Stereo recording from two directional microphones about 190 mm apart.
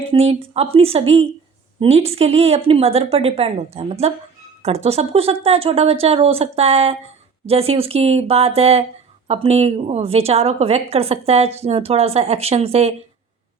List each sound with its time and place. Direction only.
0.1 s a woman's voice: 30° right (ahead or behind)